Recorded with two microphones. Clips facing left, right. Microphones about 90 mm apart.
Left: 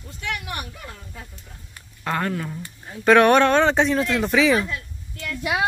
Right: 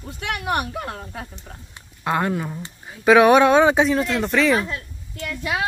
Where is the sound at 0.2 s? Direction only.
60° right (ahead or behind).